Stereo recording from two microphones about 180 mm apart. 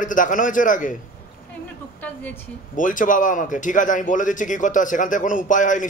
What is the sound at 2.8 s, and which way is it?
A man's voice, 50° left (ahead or behind).